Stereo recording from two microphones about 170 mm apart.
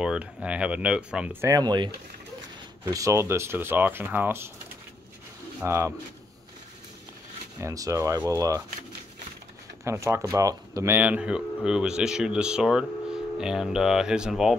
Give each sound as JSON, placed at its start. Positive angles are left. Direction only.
{"t": 0.0, "sound": "speech", "side_deg": -5}
{"t": 5.6, "sound": "speech", "side_deg": -15}
{"t": 7.6, "sound": "speech", "side_deg": -20}
{"t": 9.8, "sound": "speech", "side_deg": -15}